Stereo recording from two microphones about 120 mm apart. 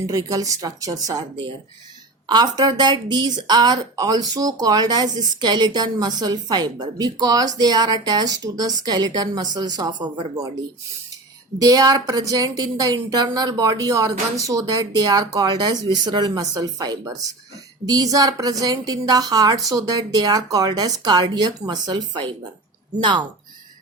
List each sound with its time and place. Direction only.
0.1 s speech: 30° right (ahead or behind)
2.2 s speech: 35° right (ahead or behind)
11.6 s speech: 30° right (ahead or behind)